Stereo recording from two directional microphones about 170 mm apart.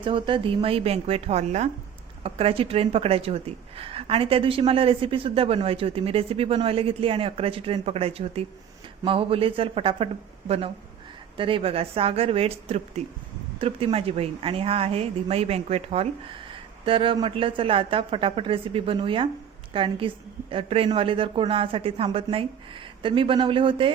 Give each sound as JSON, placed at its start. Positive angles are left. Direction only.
{"t": 0.0, "sound": "a woman's voice", "side_deg": -30}
{"t": 11.3, "sound": "a woman's voice", "side_deg": -30}